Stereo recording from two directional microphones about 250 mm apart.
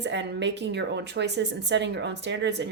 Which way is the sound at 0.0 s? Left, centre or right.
Right.